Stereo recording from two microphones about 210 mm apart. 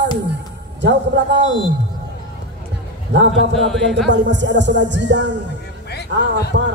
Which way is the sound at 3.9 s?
55° right (ahead or behind).